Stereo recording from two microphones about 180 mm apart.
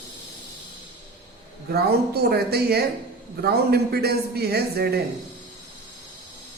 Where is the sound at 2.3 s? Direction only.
60° right (ahead or behind).